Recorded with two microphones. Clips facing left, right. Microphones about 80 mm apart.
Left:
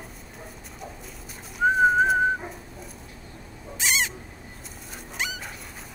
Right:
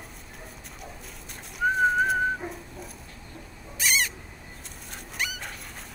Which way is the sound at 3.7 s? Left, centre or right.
Left.